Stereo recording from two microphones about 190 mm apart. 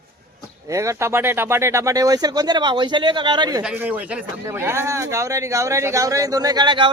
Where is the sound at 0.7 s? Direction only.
15° right (ahead or behind).